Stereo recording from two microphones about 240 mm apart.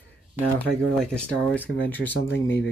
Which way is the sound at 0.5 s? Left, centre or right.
Centre.